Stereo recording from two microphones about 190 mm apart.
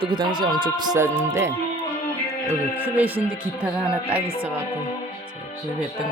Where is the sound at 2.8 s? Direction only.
10° right (ahead or behind).